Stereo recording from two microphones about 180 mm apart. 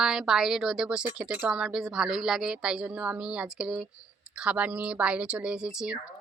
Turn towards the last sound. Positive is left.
turn(degrees=-5)  # may be behind; listen again after turning